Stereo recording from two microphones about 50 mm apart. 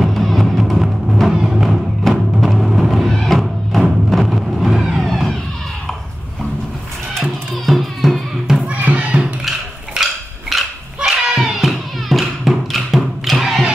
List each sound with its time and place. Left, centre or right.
0.0 s music: centre
4.1 s vehicle: centre
5.0 s vehicle: centre
7.2 s music: centre
8.6 s a sound: right
10.5 s a sound: centre
11.1 s music: centre